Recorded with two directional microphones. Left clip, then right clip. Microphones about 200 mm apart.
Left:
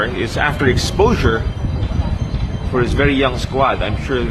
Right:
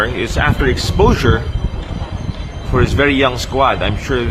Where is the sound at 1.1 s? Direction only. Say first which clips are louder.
Right 1 dB; 15° right (ahead or behind).